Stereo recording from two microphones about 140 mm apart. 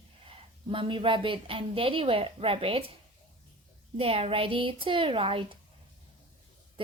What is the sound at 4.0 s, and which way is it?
A woman's voice, 45° right (ahead or behind).